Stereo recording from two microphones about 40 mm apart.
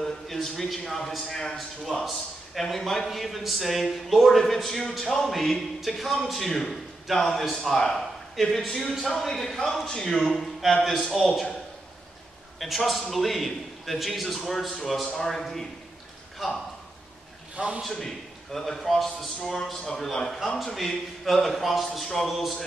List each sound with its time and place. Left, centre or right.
0.0 s a sound: centre
0.7 s a man's voice: centre
12.5 s a man's voice: centre
17.6 s a man's voice: right
17.8 s a man's voice: centre